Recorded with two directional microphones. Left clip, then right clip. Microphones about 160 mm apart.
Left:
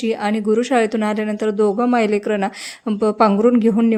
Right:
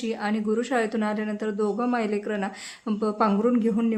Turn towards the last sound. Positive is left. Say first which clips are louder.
# left 9 dB
turn(degrees=50)  # may be behind; listen again after turning